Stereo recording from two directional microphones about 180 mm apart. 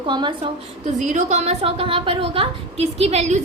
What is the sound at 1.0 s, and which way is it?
A woman's voice, 40° right (ahead or behind).